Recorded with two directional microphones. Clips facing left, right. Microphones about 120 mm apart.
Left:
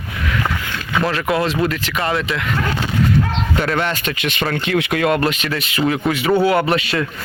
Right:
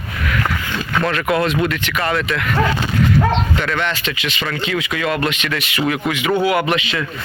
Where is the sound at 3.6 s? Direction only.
40° left (ahead or behind).